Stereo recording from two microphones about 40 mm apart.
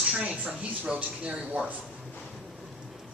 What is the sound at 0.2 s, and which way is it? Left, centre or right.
Speech, right.